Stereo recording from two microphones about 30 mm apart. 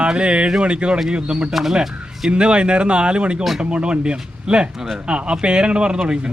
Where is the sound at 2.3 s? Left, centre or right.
Right.